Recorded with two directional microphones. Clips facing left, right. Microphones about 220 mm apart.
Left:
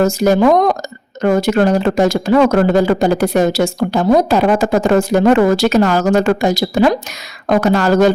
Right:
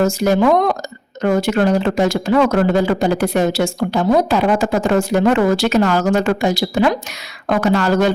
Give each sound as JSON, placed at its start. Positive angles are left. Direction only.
{"t": 0.0, "sound": "a woman's voice", "side_deg": 40}